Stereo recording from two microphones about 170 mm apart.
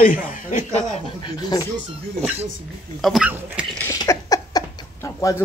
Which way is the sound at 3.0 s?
Centre (ahead or behind).